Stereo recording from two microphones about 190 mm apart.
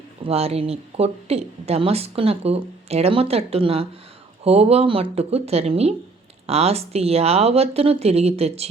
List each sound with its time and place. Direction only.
0.3 s speech: 35° right (ahead or behind)